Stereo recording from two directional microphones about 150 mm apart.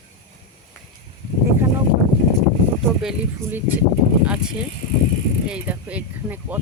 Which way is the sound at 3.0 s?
10° right (ahead or behind).